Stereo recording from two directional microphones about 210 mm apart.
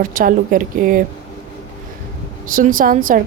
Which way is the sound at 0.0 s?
40° right (ahead or behind).